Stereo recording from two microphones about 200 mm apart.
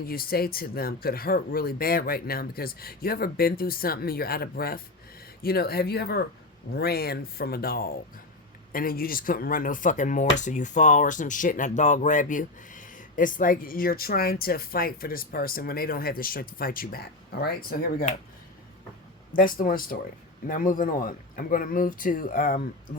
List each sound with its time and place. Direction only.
0.0 s speech: 50° left (ahead or behind)
19.3 s a man's voice: 45° left (ahead or behind)